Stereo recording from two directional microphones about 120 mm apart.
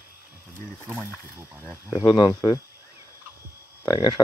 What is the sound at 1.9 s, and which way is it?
Speech, 40° left (ahead or behind).